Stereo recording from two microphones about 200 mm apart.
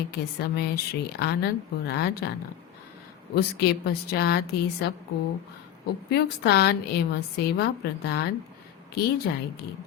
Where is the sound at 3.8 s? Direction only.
55° left (ahead or behind).